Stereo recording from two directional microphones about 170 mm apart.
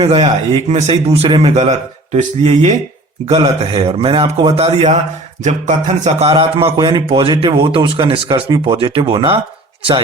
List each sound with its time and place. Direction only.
0.0 s a man's voice: 35° right (ahead or behind)